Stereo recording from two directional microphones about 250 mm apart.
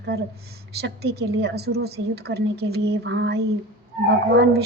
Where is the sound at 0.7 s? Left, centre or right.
Right.